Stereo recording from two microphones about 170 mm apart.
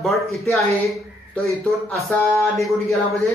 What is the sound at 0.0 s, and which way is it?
Speech, centre (ahead or behind).